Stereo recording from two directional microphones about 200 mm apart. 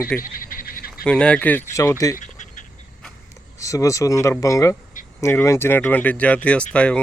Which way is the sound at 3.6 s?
15° left (ahead or behind).